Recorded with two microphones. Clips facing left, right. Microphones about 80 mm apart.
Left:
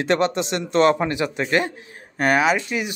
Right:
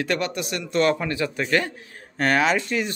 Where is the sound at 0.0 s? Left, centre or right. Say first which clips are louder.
Left 5 dB; left.